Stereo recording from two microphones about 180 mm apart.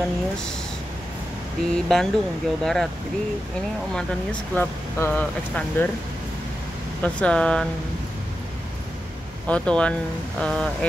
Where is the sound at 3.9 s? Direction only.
5° left (ahead or behind).